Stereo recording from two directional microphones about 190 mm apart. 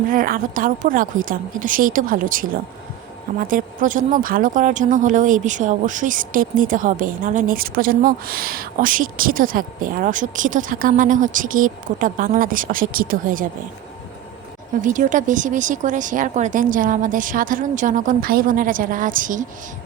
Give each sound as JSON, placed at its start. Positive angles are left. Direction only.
{"t": 0.1, "sound": "speech", "side_deg": -45}
{"t": 14.8, "sound": "speech", "side_deg": -40}